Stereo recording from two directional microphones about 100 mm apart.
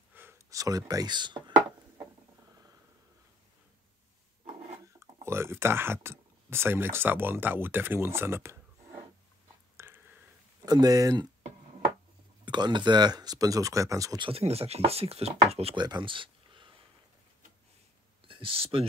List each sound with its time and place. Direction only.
0.1 s a sound: 20° right (ahead or behind)
0.5 s speech: 35° right (ahead or behind)
4.8 s speech: 30° right (ahead or behind)
9.8 s a sound: 25° right (ahead or behind)
10.6 s speech: 40° right (ahead or behind)
12.4 s speech: 50° right (ahead or behind)
14.3 s speech: 85° right
15.7 s speech: 50° right (ahead or behind)
18.2 s speech: 65° right (ahead or behind)